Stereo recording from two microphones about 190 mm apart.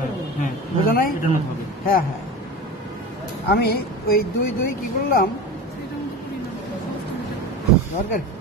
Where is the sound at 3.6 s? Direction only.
55° left (ahead or behind).